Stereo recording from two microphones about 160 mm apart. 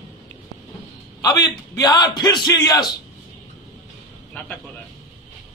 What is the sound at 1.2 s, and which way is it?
A man's voice, 25° left (ahead or behind).